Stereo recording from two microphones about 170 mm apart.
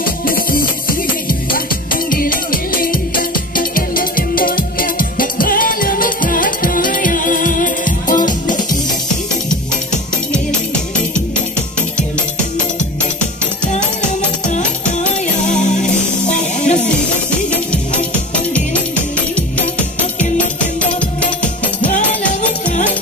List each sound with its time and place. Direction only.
0.0 s music: 60° left (ahead or behind)
2.0 s music: 55° left (ahead or behind)
15.6 s music: 45° left (ahead or behind)
18.3 s music: 5° left (ahead or behind)
20.2 s music: 10° left (ahead or behind)